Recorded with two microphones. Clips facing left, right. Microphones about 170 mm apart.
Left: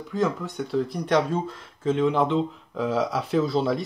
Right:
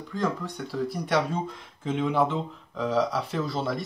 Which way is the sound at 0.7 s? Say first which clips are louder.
Left 4 dB; 5° right (ahead or behind).